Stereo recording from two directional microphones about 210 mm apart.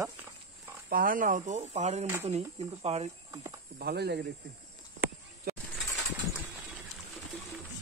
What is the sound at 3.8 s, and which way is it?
Speech, 50° right (ahead or behind).